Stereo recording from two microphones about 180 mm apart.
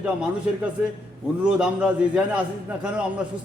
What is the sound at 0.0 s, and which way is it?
Speech, 5° right (ahead or behind).